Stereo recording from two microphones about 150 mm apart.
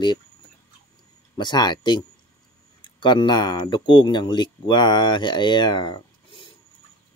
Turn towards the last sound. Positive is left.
turn(degrees=30)  # may be behind; listen again after turning